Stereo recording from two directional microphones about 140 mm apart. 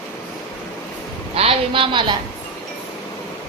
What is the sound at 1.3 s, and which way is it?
Speech, 45° right (ahead or behind).